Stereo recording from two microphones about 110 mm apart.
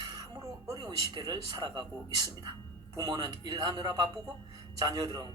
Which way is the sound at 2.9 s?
35° right (ahead or behind).